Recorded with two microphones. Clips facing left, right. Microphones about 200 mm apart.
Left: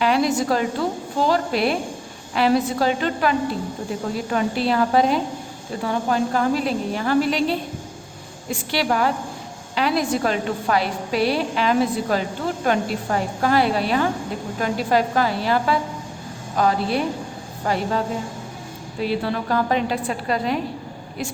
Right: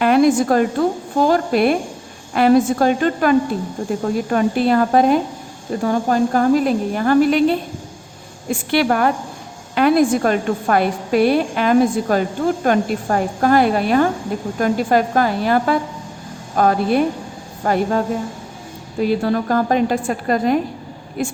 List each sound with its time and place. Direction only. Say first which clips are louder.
0.0 s a woman's voice: right 6 dB; 50° right (ahead or behind)